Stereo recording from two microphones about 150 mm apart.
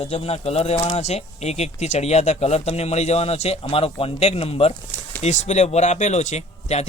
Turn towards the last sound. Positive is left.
turn(degrees=50)  # may be behind; listen again after turning